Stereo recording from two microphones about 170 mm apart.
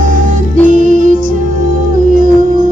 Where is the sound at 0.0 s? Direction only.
50° right (ahead or behind).